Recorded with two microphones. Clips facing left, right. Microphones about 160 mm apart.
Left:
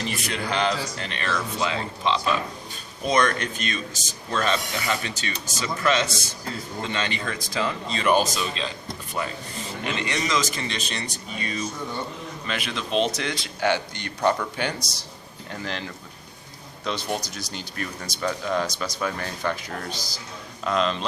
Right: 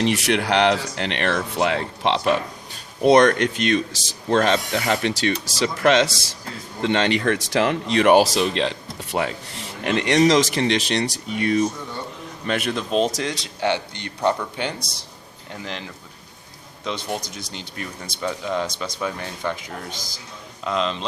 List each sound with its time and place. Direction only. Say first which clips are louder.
0.0 s speech: right 9 dB; 85° right
12.5 s a man's voice: right 6 dB; 45° right (ahead or behind)
13.2 s speech: right 1 dB; 25° right (ahead or behind)
16.8 s speech: even; 15° right (ahead or behind)